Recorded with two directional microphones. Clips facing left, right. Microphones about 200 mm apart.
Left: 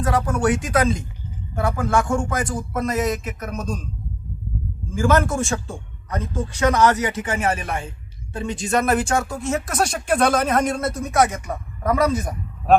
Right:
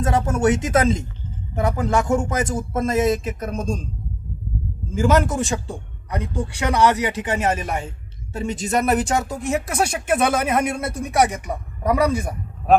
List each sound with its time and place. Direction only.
0.0 s speech: 25° right (ahead or behind)
4.9 s speech: 20° right (ahead or behind)